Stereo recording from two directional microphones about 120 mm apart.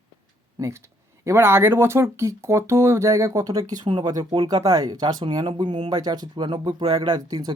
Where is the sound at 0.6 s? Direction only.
30° right (ahead or behind).